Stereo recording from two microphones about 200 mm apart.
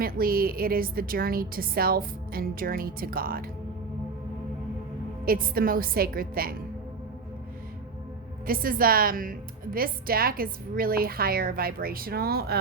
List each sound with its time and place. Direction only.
0.0 s a woman's voice: 45° right (ahead or behind)
5.2 s a woman's voice: 45° right (ahead or behind)
8.4 s a woman's voice: 45° right (ahead or behind)